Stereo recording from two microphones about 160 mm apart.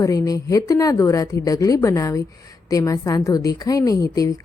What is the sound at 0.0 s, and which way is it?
A woman's voice, 20° left (ahead or behind).